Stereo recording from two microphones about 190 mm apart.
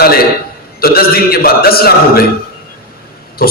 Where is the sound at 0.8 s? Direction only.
55° left (ahead or behind).